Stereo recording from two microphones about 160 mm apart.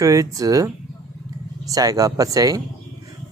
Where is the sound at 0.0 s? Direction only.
20° right (ahead or behind).